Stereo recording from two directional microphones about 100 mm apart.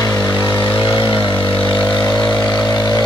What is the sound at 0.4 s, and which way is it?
Vehicle, 30° left (ahead or behind).